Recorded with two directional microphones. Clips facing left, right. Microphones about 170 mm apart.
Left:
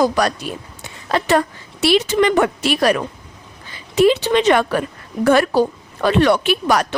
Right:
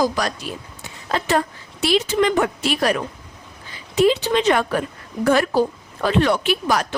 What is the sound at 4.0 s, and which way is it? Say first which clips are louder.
A woman's voice: left 3 dB; 70° left (ahead or behind).